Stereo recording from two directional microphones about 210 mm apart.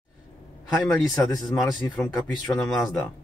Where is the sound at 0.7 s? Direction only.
Centre (ahead or behind).